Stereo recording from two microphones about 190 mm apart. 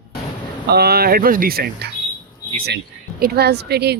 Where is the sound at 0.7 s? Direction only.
55° right (ahead or behind).